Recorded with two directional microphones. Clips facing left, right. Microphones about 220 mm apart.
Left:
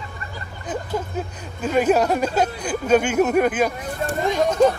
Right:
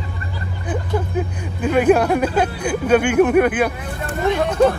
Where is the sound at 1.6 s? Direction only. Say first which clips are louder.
Right 3 dB; 10° right (ahead or behind).